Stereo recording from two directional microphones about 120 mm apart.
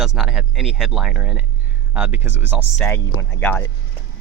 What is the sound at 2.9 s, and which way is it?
Speech, 15° left (ahead or behind).